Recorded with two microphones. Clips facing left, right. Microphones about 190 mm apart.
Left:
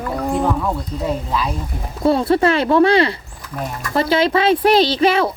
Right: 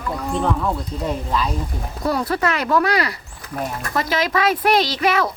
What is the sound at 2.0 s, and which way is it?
Speech, 25° left (ahead or behind).